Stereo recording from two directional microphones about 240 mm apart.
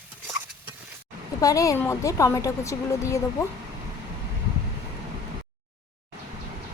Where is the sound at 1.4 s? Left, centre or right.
Centre.